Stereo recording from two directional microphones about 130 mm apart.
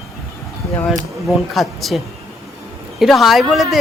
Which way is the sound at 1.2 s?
Centre (ahead or behind).